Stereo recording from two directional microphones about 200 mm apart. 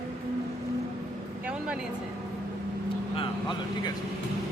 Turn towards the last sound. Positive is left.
turn(degrees=25)  # may be behind; listen again after turning